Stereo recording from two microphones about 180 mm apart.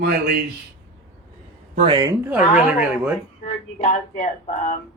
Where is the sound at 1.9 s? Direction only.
20° right (ahead or behind).